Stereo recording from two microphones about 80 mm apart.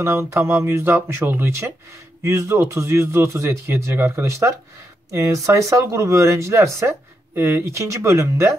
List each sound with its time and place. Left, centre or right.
0.0 s speech: right